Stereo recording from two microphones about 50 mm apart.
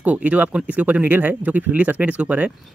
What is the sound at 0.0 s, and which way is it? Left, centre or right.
Speech, right.